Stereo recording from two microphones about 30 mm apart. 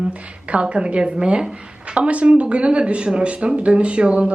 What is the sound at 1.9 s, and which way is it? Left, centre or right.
Speech, right.